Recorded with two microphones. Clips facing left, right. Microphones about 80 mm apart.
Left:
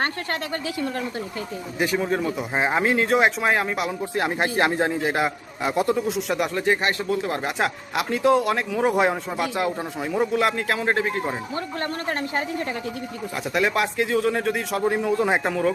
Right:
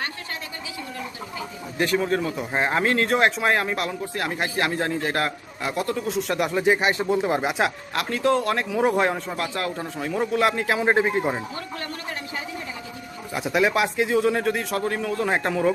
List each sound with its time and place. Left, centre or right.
1.8 s speech: centre
4.0 s a man's voice: left
6.1 s speech: centre
6.6 s a man's voice: centre
7.0 s speech: right
7.9 s speech: centre
10.1 s speech: centre
10.8 s a man's voice: centre
13.3 s speech: centre
14.8 s speech: centre
15.4 s speech: centre